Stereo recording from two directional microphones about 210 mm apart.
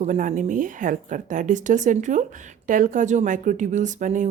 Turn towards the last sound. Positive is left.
turn(degrees=-35)  # may be behind; listen again after turning